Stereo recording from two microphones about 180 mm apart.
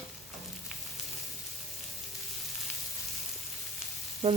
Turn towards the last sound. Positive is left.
turn(degrees=-35)  # may be behind; listen again after turning